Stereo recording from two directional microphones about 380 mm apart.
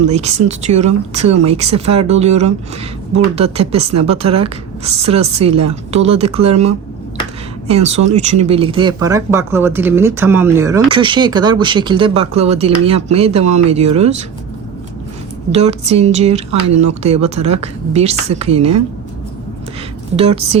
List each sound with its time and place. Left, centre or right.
0.0 s speech: centre
15.5 s speech: centre
20.1 s speech: centre